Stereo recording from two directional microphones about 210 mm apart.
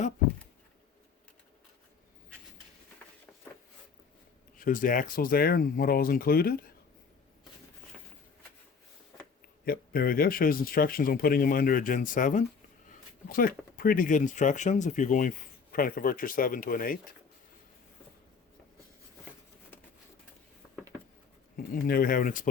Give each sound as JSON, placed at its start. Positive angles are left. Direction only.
{"t": 4.5, "sound": "speech", "side_deg": 40}
{"t": 9.6, "sound": "speech", "side_deg": 45}
{"t": 21.5, "sound": "speech", "side_deg": 45}